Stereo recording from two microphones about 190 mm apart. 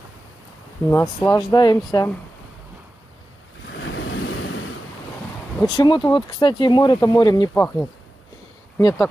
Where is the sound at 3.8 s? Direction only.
85° left.